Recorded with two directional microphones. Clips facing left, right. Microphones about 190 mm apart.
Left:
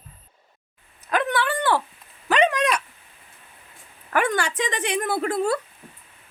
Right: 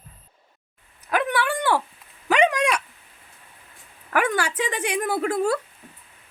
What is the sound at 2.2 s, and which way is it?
Dog, 10° right (ahead or behind).